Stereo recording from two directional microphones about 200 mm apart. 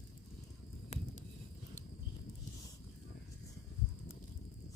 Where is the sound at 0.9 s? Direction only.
35° left (ahead or behind).